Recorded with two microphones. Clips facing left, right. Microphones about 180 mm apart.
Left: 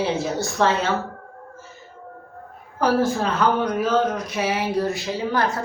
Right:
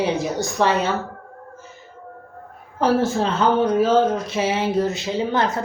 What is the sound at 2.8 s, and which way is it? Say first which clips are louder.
Speech: right 1 dB; 25° right (ahead or behind).